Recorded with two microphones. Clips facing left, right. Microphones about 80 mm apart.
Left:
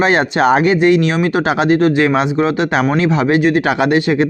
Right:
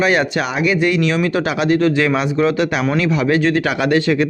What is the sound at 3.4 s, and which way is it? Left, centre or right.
Speech, centre.